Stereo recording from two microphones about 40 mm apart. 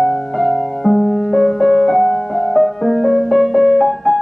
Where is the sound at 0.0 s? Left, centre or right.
Centre.